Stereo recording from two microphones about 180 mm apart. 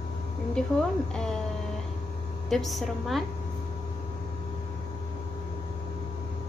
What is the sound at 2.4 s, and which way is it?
Speech, centre (ahead or behind).